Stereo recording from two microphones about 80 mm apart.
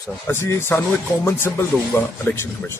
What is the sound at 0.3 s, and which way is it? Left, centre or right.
Speech, left.